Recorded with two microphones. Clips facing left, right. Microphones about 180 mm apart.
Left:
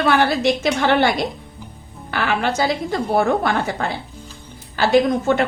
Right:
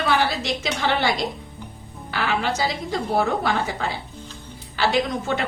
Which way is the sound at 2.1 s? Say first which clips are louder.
Left 3 dB; 55° left (ahead or behind).